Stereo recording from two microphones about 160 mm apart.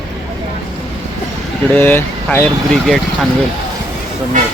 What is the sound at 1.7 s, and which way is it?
Speech, 10° left (ahead or behind).